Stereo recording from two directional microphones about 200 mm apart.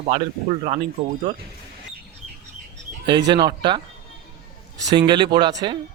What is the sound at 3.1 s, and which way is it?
Speech, 20° right (ahead or behind).